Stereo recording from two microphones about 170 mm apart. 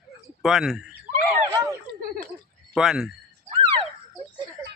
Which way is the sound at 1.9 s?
60° right (ahead or behind).